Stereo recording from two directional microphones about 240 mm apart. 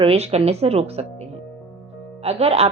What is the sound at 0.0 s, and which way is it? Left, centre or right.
A woman's voice, right.